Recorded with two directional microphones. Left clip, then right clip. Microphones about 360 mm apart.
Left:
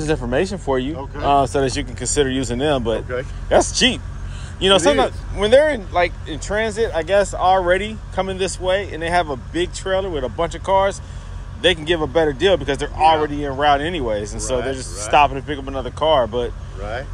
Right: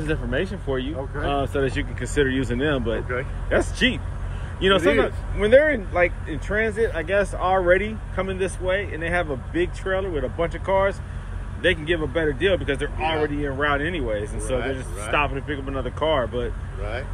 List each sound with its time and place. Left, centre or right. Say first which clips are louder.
0.0 s speech: left 6 dB; left